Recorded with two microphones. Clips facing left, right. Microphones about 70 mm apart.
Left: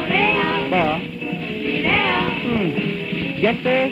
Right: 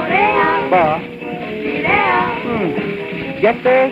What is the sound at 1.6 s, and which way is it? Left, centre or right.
Music, right.